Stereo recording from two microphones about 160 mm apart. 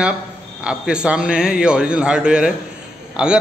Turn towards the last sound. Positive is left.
turn(degrees=-5)  # may be behind; listen again after turning